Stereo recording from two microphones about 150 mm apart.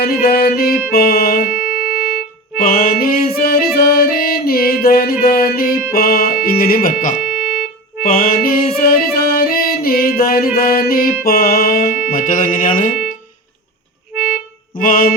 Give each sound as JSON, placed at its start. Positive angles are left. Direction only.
{"t": 0.0, "sound": "music", "side_deg": 90}
{"t": 1.5, "sound": "music", "side_deg": -5}
{"t": 2.6, "sound": "music", "side_deg": 75}
{"t": 7.2, "sound": "music", "side_deg": -5}
{"t": 8.0, "sound": "music", "side_deg": 75}
{"t": 14.8, "sound": "music", "side_deg": 70}